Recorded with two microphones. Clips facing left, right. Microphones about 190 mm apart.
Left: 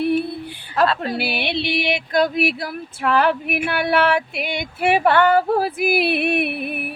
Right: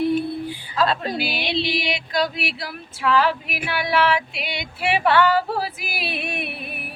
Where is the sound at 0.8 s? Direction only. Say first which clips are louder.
Left 3 dB; 65° left (ahead or behind).